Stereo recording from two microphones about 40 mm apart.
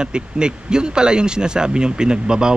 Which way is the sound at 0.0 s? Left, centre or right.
Right.